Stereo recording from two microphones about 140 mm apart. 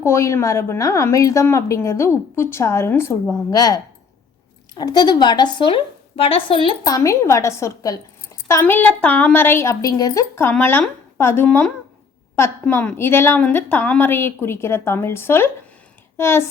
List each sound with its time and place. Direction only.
0.0 s a woman's voice: 20° left (ahead or behind); by 6.4 s 40° left (ahead or behind)
6.8 s a woman's voice: 25° left (ahead or behind)